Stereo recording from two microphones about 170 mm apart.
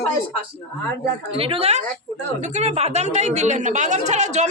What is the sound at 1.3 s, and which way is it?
A woman's voice, 35° right (ahead or behind).